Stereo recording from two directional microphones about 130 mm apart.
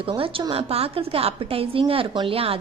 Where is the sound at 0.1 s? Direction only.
45° right (ahead or behind).